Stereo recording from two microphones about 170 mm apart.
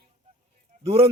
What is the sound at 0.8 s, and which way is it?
Speech, 35° right (ahead or behind).